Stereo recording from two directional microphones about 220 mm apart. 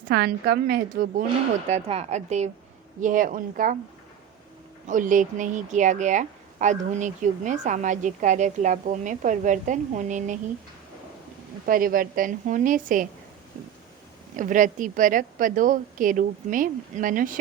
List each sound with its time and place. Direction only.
0.0 s speech: 40° right (ahead or behind)
4.9 s speech: 35° right (ahead or behind)
11.6 s speech: 40° right (ahead or behind)
14.3 s speech: 35° right (ahead or behind)